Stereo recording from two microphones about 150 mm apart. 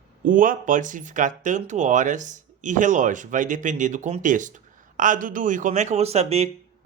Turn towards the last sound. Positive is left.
turn(degrees=-45)  # may be behind; listen again after turning